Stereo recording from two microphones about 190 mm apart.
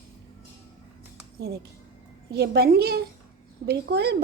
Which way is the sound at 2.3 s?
55° right (ahead or behind).